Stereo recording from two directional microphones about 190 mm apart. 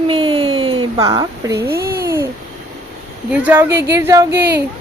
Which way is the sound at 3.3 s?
5° right (ahead or behind).